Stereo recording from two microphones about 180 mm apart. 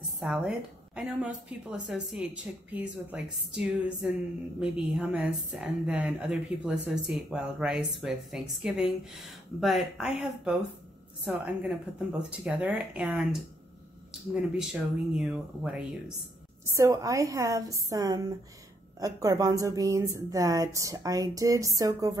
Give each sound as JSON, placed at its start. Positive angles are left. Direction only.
{"t": 0.2, "sound": "a woman's voice", "side_deg": -5}
{"t": 16.6, "sound": "a woman's voice", "side_deg": -15}